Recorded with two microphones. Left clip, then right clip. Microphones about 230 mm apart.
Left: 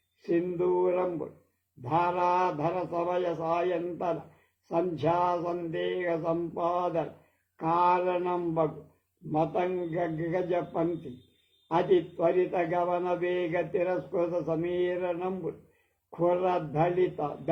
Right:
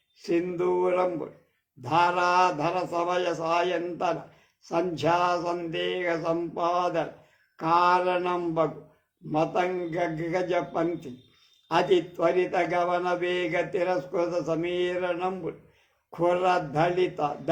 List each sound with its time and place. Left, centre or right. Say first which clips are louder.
0.3 s a man's voice: right 2 dB; right
5.7 s a man's voice: right 1 dB; right